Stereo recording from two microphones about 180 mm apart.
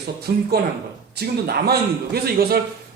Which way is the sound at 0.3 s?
60° right (ahead or behind).